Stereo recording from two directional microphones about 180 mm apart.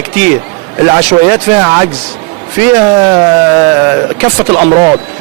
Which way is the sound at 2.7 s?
20° right (ahead or behind).